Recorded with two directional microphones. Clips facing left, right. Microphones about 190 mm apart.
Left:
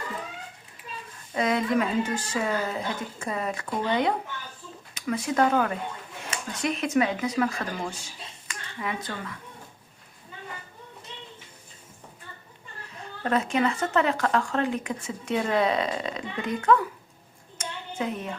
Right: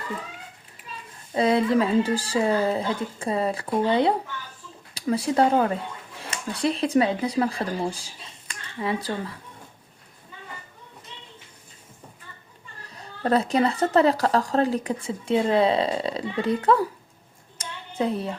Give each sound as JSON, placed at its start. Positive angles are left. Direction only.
{"t": 1.3, "sound": "a woman's voice", "side_deg": -30}
{"t": 12.9, "sound": "a woman's voice", "side_deg": -35}
{"t": 17.6, "sound": "a sound", "side_deg": -35}